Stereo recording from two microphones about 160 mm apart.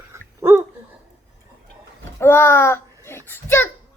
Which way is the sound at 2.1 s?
15° left (ahead or behind).